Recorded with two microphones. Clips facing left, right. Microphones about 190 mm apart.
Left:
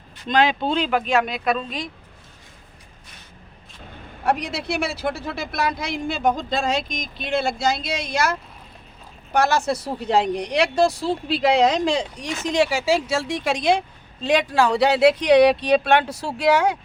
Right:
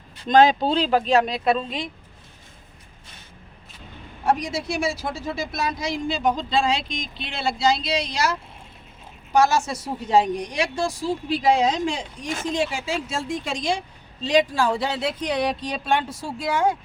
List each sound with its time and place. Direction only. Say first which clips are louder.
0.3 s speech: right 3 dB; 40° right (ahead or behind); by 1.9 s 25° right (ahead or behind)
4.2 s a woman's voice: even; 65° left (ahead or behind); by 16.7 s 80° left